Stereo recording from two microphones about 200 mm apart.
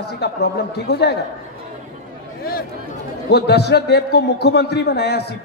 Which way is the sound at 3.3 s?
55° left (ahead or behind).